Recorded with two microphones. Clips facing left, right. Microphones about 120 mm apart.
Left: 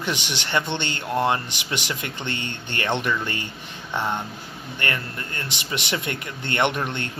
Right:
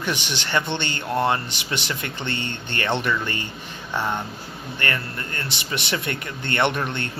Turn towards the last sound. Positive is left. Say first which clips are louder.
# right 1 dB
turn(degrees=15)  # may be behind; listen again after turning